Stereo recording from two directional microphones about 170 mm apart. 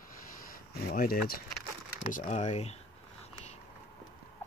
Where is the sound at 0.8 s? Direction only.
60° left (ahead or behind).